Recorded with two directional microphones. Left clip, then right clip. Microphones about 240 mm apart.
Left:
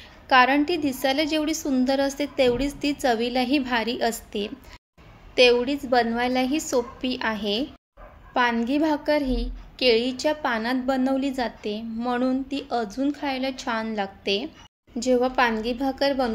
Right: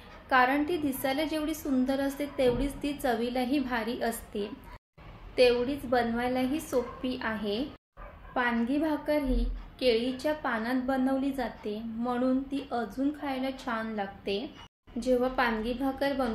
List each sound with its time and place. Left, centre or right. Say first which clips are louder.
0.3 s a woman's voice: left 7 dB; left